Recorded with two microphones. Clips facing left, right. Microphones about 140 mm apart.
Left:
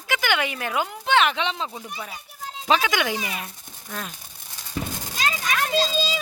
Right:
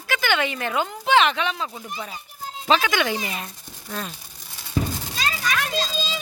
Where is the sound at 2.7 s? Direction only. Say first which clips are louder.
Right 1 dB; 15° left (ahead or behind).